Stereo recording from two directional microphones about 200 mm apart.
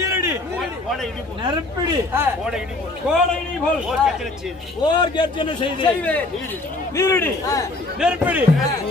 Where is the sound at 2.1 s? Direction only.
10° right (ahead or behind).